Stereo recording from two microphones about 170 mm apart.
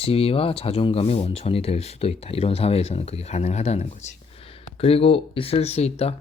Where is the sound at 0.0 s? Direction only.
35° left (ahead or behind).